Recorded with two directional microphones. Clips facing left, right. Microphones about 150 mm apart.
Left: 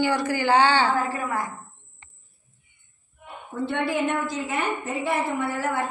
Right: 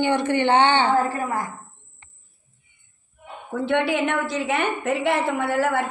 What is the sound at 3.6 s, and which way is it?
A woman's voice, 90° right.